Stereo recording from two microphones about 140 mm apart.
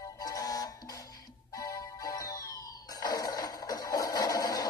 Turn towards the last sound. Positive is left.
turn(degrees=25)  # may be behind; listen again after turning